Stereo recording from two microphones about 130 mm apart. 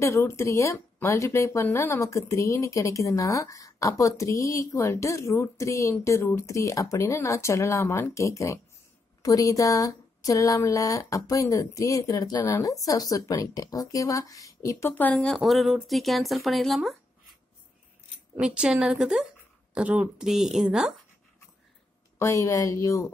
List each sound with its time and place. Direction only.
0.0 s speech: 20° left (ahead or behind)
15.1 s speech: 5° left (ahead or behind)
18.3 s a woman's voice: 10° right (ahead or behind)
22.2 s speech: 25° left (ahead or behind)